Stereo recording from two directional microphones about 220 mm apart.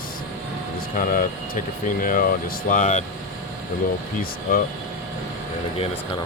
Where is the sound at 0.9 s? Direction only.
35° left (ahead or behind).